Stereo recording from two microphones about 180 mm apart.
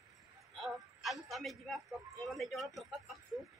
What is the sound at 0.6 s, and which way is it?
A man's voice, centre (ahead or behind).